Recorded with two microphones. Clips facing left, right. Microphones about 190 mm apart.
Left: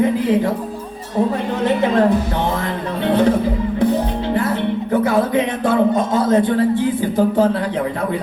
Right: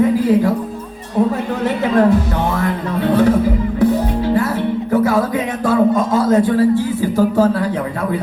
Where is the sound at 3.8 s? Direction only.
20° left (ahead or behind).